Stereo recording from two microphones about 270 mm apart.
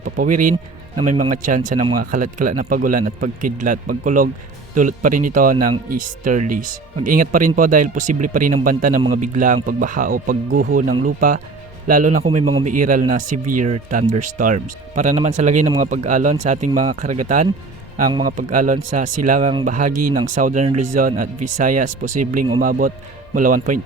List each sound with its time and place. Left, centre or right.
0.2 s a man's voice: right
0.5 s a man's voice: centre
13.3 s speech: right
13.6 s a man's voice: right
21.3 s speech: right
21.6 s a man's voice: right